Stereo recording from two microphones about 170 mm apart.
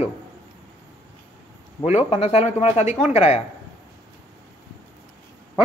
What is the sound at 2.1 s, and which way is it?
Speech, 40° left (ahead or behind).